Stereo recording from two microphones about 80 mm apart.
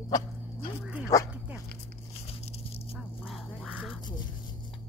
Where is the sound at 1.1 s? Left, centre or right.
Left.